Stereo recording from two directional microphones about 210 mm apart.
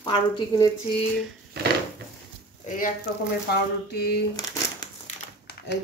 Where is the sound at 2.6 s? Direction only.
40° left (ahead or behind).